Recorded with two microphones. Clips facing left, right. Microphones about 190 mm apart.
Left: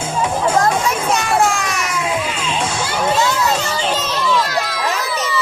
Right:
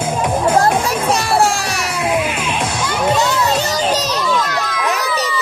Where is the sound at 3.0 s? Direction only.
35° right (ahead or behind).